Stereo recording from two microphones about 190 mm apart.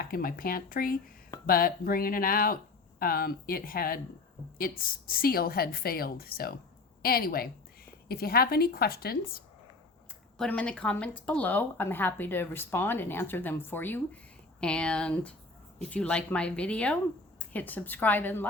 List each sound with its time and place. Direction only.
0.0 s a woman's voice: 50° left (ahead or behind)
10.3 s a woman's voice: 5° left (ahead or behind)